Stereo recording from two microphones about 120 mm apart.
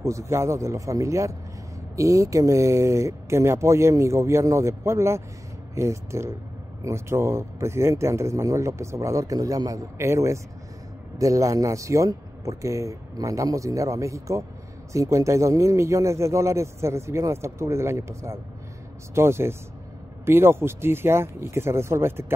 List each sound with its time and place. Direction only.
0.0 s speech: 25° right (ahead or behind)